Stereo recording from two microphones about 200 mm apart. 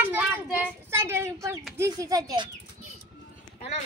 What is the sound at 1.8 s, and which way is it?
Bird, 15° right (ahead or behind).